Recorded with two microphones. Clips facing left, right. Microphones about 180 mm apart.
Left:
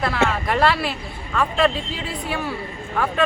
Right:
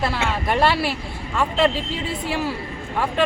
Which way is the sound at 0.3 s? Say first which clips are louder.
Even; 25° right (ahead or behind).